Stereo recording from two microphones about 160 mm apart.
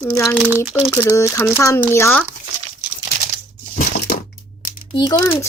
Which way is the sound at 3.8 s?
60° left (ahead or behind).